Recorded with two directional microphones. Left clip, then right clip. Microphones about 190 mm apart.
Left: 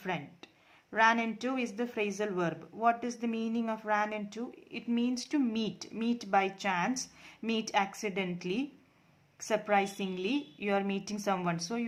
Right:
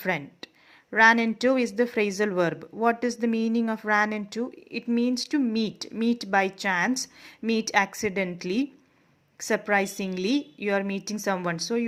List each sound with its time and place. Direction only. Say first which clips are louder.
0.0 s speech: right 9 dB; 25° right (ahead or behind)